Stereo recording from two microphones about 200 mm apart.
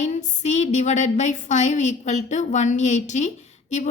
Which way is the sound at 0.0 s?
35° left (ahead or behind).